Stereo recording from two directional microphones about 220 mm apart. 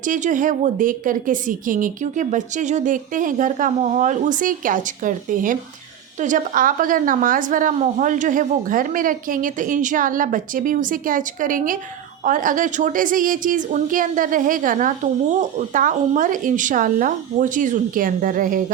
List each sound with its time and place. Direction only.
0.0 s a woman's voice: 35° right (ahead or behind)